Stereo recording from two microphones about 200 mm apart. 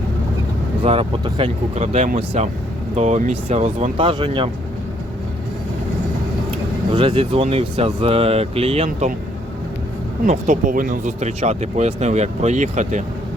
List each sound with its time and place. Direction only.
0.8 s speech: 25° right (ahead or behind)
6.9 s speech: 25° right (ahead or behind)
10.2 s speech: 40° right (ahead or behind)